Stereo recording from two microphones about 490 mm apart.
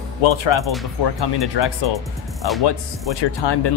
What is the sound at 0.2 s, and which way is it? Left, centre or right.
Speech, left.